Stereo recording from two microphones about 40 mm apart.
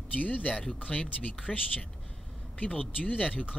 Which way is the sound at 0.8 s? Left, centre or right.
Left.